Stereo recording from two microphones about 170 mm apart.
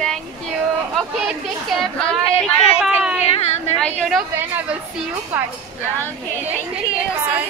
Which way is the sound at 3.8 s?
5° left (ahead or behind).